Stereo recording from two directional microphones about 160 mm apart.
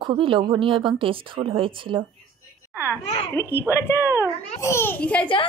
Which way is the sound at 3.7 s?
15° left (ahead or behind).